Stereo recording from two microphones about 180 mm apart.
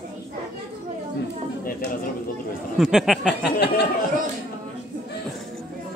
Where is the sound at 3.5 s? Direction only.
65° left (ahead or behind).